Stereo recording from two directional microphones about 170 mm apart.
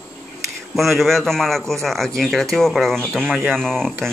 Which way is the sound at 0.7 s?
Centre (ahead or behind).